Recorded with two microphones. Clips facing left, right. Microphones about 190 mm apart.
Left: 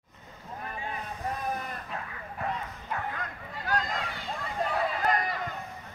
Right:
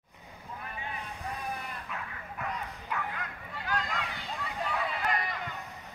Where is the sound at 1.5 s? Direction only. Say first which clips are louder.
Left 4 dB; 40° left (ahead or behind).